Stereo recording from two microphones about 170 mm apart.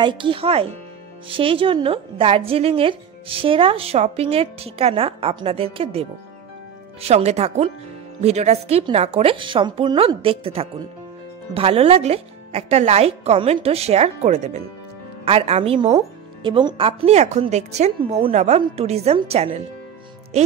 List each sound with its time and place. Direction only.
0.0 s speech: 30° right (ahead or behind)